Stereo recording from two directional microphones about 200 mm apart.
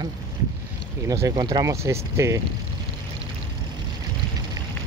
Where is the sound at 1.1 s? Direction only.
20° right (ahead or behind).